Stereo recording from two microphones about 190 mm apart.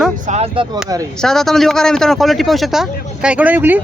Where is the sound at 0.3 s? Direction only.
30° right (ahead or behind).